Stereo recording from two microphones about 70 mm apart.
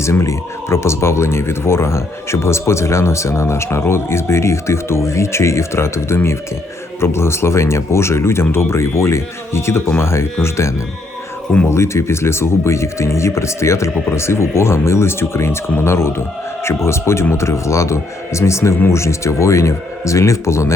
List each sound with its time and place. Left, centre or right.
0.0 s speech: left